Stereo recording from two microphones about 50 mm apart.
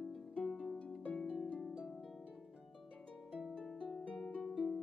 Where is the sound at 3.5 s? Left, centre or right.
Centre.